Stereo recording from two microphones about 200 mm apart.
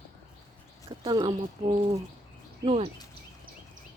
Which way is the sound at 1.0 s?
20° right (ahead or behind).